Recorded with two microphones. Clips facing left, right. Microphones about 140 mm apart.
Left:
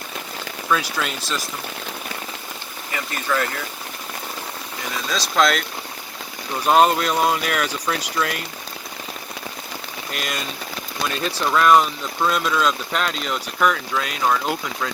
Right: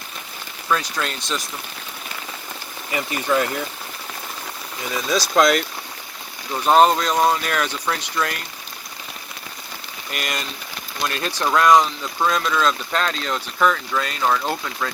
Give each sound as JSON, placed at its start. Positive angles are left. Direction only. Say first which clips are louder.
{"t": 0.7, "sound": "speech", "louder": "even", "side_deg": 5}
{"t": 2.9, "sound": "speech", "louder": "right 3 dB", "side_deg": -20}
{"t": 5.4, "sound": "speech", "louder": "right 2 dB", "side_deg": 0}
{"t": 6.7, "sound": "speech", "louder": "right 1 dB", "side_deg": 0}
{"t": 10.1, "sound": "speech", "louder": "even", "side_deg": 0}